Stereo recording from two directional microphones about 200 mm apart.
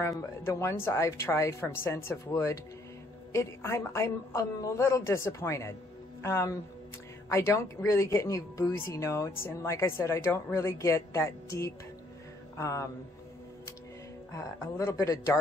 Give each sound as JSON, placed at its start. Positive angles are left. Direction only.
{"t": 0.0, "sound": "a woman's voice", "side_deg": 15}
{"t": 14.3, "sound": "a woman's voice", "side_deg": 15}